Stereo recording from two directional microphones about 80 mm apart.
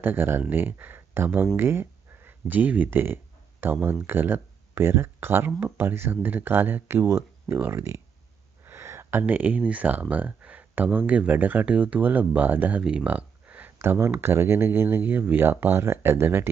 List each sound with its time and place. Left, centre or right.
0.0 s speech: right
8.6 s a sound: right
9.2 s speech: centre
13.7 s speech: right